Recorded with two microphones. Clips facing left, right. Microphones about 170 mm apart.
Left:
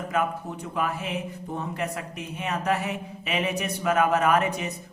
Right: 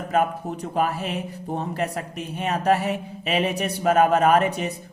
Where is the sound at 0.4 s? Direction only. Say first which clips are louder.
Right 5 dB; 35° right (ahead or behind).